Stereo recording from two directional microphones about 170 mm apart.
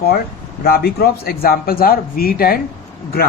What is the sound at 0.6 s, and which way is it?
Speech, 65° left (ahead or behind).